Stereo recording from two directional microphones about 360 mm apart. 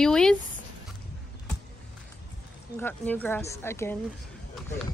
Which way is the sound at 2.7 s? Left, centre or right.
Centre.